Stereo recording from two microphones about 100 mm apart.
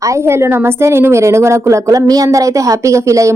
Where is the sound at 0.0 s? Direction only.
30° right (ahead or behind).